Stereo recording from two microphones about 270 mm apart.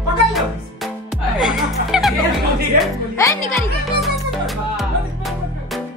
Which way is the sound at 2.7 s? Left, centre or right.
Right.